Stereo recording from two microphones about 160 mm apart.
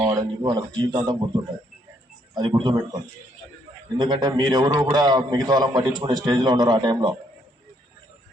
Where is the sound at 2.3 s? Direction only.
25° right (ahead or behind).